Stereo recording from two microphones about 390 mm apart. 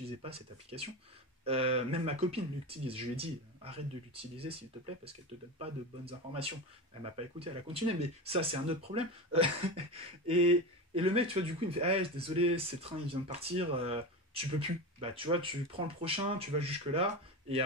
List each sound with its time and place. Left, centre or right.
0.2 s speech: centre